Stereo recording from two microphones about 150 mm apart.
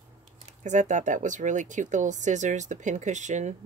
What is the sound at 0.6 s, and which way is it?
Speech, 55° right (ahead or behind).